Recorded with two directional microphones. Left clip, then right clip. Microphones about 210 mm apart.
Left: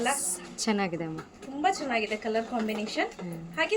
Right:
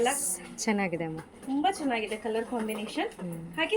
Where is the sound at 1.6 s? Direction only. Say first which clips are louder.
Left 2 dB; 30° left (ahead or behind).